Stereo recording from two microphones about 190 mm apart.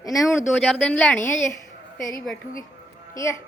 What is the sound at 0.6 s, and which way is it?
Speech, centre (ahead or behind).